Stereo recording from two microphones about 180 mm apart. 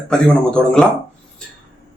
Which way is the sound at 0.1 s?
5° left (ahead or behind).